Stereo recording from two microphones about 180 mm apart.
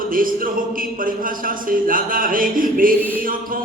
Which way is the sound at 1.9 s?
50° right (ahead or behind).